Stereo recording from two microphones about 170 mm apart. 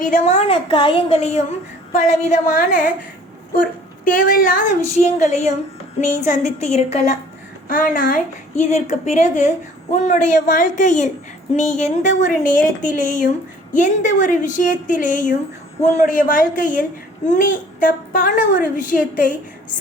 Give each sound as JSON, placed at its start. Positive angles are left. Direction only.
{"t": 0.0, "sound": "a woman's voice", "side_deg": 45}
{"t": 4.0, "sound": "a child's voice", "side_deg": 55}
{"t": 7.7, "sound": "a child's voice", "side_deg": 55}